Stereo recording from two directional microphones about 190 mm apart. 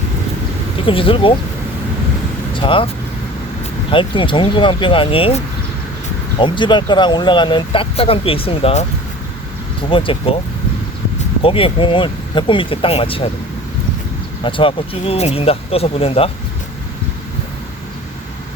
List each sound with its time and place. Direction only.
0.9 s speech: 30° left (ahead or behind)
2.5 s speech: 25° left (ahead or behind)
6.4 s speech: 25° left (ahead or behind)
9.9 s speech: 25° left (ahead or behind)
11.4 s speech: 30° left (ahead or behind)
14.4 s speech: 25° left (ahead or behind)